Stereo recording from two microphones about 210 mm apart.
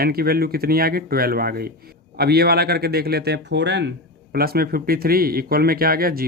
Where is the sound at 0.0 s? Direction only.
45° right (ahead or behind).